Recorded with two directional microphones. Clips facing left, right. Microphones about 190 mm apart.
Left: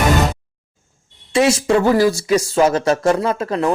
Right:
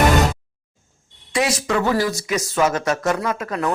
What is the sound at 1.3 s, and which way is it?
A man's voice, 25° left (ahead or behind).